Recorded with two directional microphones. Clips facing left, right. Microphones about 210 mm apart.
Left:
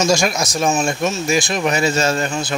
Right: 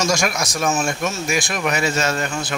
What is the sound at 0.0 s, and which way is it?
Speech, 30° left (ahead or behind).